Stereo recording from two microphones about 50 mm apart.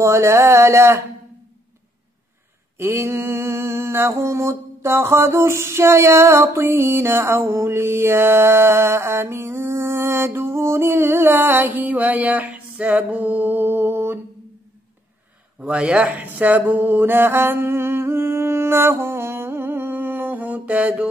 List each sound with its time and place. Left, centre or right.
0.0 s speech: right
2.8 s a sound: right
15.6 s a man's voice: right
16.3 s mantra: right